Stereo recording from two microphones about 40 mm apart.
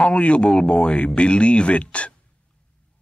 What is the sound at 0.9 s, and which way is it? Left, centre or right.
Speech, left.